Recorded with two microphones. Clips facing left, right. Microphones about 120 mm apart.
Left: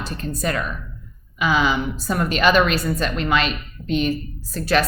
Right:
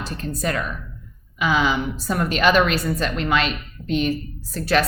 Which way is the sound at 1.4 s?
20° left (ahead or behind).